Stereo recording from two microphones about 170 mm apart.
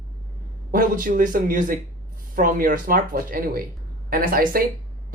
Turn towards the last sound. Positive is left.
turn(degrees=-55)  # may be behind; listen again after turning